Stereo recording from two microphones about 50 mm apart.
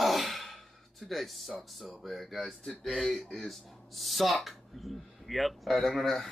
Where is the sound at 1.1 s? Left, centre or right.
Centre.